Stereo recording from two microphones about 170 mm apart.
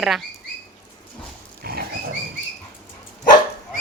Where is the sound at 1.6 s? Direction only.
65° right (ahead or behind).